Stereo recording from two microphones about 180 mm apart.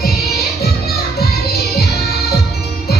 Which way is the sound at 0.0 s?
60° left (ahead or behind).